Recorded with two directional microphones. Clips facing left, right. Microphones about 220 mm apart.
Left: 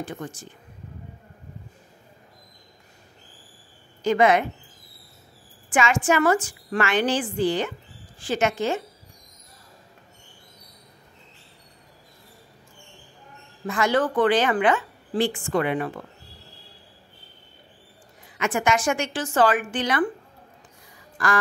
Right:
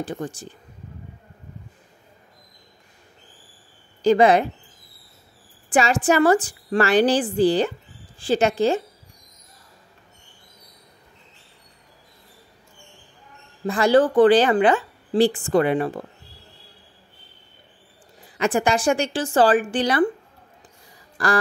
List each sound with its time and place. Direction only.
0.0 s a woman's voice: 35° right (ahead or behind)
4.0 s a woman's voice: 35° right (ahead or behind)
5.7 s a woman's voice: 35° right (ahead or behind)
13.7 s a woman's voice: 35° right (ahead or behind)
18.4 s a woman's voice: 35° right (ahead or behind)
21.2 s quack: 35° right (ahead or behind)